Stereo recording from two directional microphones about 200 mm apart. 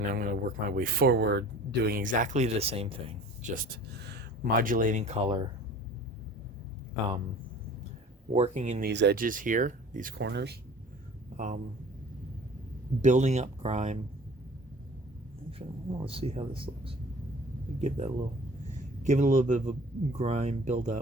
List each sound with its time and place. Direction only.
0.1 s speech: 45° right (ahead or behind)
3.5 s speech: 50° right (ahead or behind); by 5.4 s 30° right (ahead or behind)
8.3 s speech: 35° right (ahead or behind)
8.9 s speech: 60° right (ahead or behind); by 10.2 s 40° right (ahead or behind)
10.2 s speech: 60° right (ahead or behind)
11.3 s speech: 40° right (ahead or behind)
13.0 s speech: 35° right (ahead or behind)
15.5 s speech: 25° right (ahead or behind)